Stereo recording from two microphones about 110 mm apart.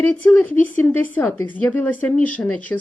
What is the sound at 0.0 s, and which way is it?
Speech, 15° left (ahead or behind).